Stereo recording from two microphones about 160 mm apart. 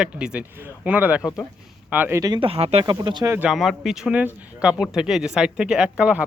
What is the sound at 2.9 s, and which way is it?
Speech, 25° right (ahead or behind).